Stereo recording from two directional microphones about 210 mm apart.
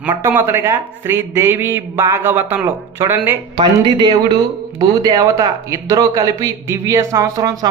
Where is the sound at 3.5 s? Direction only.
20° right (ahead or behind).